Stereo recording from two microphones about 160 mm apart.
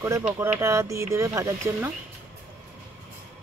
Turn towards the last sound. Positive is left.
turn(degrees=-20)  # may be behind; listen again after turning